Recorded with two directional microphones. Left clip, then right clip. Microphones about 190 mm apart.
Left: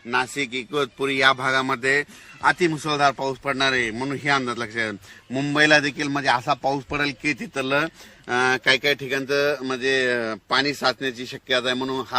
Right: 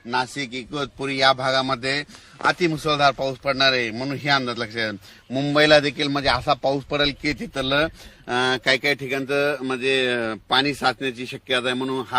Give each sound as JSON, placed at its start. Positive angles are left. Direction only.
{"t": 0.7, "sound": "a man's voice", "side_deg": -60}